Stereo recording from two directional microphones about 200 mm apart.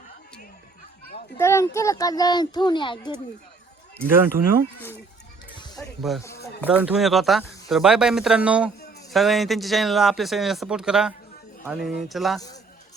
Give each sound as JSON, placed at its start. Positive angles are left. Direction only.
{"t": 1.4, "sound": "speech", "side_deg": 15}
{"t": 4.0, "sound": "speech", "side_deg": -10}
{"t": 5.5, "sound": "music", "side_deg": 20}
{"t": 6.0, "sound": "a man's voice", "side_deg": 0}